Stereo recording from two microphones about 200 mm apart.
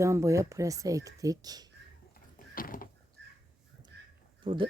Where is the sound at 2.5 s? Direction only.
45° left (ahead or behind).